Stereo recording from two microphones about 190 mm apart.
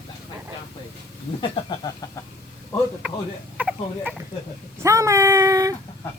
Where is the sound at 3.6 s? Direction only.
5° right (ahead or behind).